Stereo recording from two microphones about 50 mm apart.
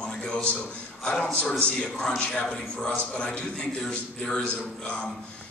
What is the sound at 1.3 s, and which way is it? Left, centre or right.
Speech, left.